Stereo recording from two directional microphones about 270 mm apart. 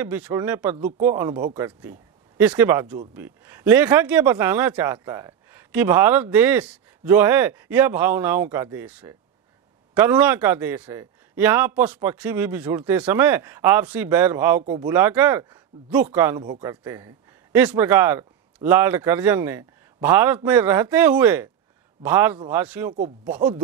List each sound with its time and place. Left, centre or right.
0.0 s speech: centre
0.7 s speech: right
1.0 s speech: centre
22.9 s speech: right